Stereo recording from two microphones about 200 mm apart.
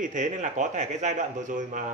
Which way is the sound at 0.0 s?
40° right (ahead or behind).